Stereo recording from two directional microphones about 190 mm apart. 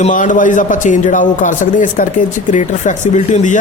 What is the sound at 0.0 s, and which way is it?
A man's voice, 40° left (ahead or behind).